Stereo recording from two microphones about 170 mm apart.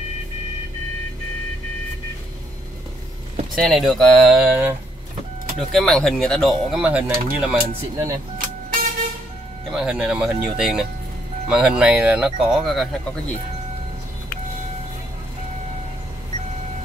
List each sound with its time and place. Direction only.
3.5 s speech: centre (ahead or behind)
7.5 s speech: 20° right (ahead or behind)
8.4 s vehicle: 55° right (ahead or behind)
9.7 s speech: 5° right (ahead or behind)